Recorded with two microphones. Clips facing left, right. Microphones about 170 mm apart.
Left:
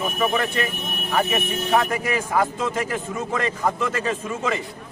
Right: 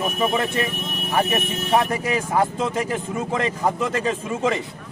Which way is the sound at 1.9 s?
30° right (ahead or behind).